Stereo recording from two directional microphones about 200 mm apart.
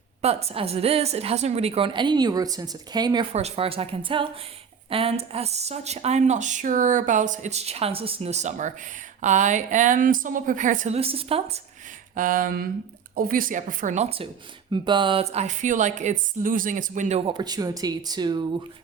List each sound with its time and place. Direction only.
0.2 s a woman's voice: 30° right (ahead or behind)
3.3 s a woman's voice: 30° right (ahead or behind)
12.1 s a sound: 45° right (ahead or behind)
13.1 s speech: 45° right (ahead or behind); by 18.4 s 20° right (ahead or behind)